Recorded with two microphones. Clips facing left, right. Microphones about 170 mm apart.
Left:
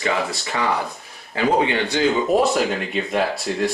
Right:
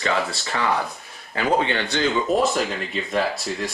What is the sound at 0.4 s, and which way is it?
Speech, 20° left (ahead or behind).